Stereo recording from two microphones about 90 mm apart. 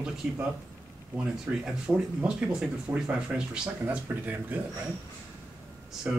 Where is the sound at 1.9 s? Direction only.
15° right (ahead or behind).